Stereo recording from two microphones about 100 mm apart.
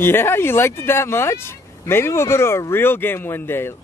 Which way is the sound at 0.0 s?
25° left (ahead or behind).